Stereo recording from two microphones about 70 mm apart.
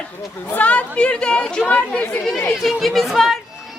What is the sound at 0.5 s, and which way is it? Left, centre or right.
Speech, left.